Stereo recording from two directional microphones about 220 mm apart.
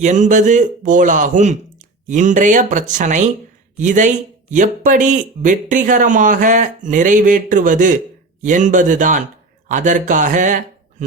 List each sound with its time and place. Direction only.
0.0 s speech: 35° right (ahead or behind)